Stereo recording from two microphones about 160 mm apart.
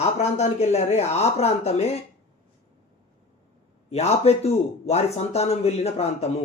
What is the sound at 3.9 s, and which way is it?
A man's voice, 40° left (ahead or behind).